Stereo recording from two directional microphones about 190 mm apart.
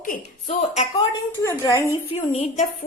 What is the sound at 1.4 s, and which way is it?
Speech, 15° left (ahead or behind).